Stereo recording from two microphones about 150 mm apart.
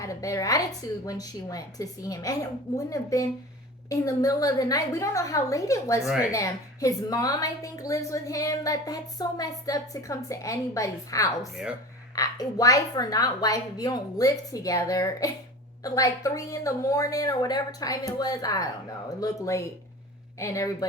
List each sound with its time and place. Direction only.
0.0 s a woman's voice: 20° left (ahead or behind)
6.0 s speech: 5° right (ahead or behind)
6.3 s a woman's voice: 20° left (ahead or behind)